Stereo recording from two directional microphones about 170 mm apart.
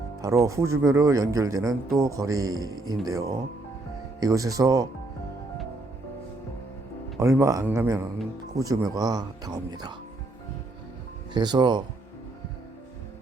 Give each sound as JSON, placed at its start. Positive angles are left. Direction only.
{"t": 0.2, "sound": "speech", "side_deg": -20}
{"t": 7.2, "sound": "speech", "side_deg": -15}
{"t": 11.3, "sound": "speech", "side_deg": -25}